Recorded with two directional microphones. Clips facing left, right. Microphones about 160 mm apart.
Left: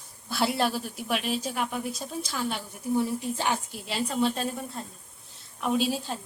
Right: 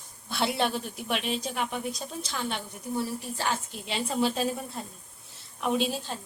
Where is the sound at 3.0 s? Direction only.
20° left (ahead or behind).